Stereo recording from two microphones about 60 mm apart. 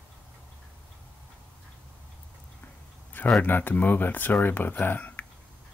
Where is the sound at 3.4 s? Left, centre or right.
Left.